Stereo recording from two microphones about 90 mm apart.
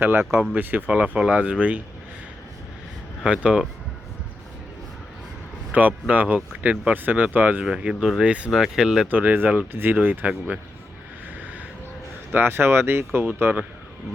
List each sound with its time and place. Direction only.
0.0 s speech: 25° right (ahead or behind)
3.2 s speech: 10° right (ahead or behind)
5.7 s speech: 15° right (ahead or behind)
9.0 s speech: 20° right (ahead or behind)
12.3 s speech: 25° right (ahead or behind)